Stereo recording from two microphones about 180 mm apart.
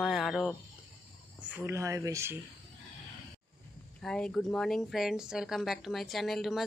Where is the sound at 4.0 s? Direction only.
5° left (ahead or behind).